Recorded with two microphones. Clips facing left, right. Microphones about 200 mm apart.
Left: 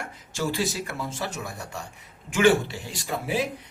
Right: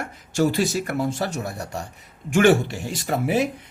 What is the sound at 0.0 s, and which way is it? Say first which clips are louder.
Speech: right 8 dB; 45° right (ahead or behind).